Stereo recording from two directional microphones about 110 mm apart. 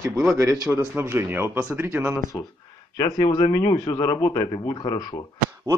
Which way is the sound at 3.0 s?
40° left (ahead or behind).